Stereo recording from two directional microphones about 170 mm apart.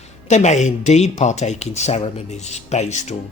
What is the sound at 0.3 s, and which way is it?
Speech, 45° left (ahead or behind).